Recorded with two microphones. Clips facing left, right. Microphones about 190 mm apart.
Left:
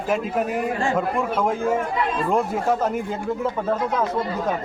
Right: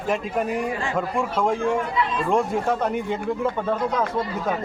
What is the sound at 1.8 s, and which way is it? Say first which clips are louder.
Speech: left 1 dB; 50° left (ahead or behind).